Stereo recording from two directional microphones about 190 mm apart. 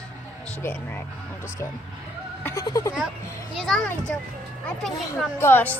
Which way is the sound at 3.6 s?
Centre (ahead or behind).